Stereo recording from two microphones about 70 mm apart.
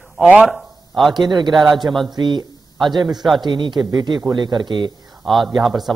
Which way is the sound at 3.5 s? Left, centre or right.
Right.